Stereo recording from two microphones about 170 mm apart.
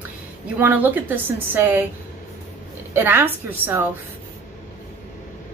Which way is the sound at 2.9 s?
10° right (ahead or behind).